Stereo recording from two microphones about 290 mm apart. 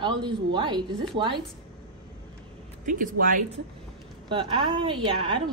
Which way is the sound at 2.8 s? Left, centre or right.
Right.